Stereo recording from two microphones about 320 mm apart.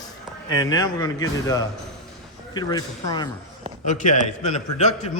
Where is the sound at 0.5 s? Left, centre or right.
Centre.